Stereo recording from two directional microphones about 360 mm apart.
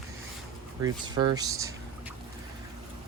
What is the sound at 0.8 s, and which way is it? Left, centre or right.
Speech, centre.